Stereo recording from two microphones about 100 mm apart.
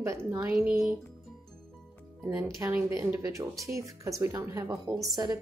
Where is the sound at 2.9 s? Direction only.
30° right (ahead or behind).